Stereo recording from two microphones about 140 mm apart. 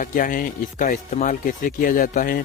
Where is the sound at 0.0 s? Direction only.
75° left (ahead or behind).